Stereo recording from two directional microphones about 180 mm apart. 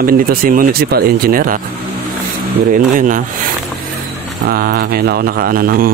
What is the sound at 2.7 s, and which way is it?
Speech, 50° right (ahead or behind).